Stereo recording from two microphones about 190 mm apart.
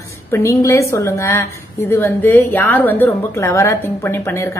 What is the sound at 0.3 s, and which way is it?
A woman's voice, 15° left (ahead or behind).